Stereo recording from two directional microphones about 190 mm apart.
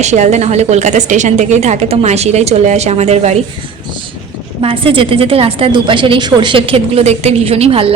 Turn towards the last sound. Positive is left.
turn(degrees=-30)  # may be behind; listen again after turning